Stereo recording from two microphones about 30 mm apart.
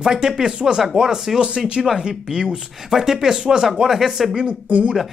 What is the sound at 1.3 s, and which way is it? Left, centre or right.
Speech, right.